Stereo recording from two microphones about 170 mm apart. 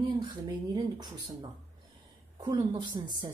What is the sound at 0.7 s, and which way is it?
Speech, 25° right (ahead or behind).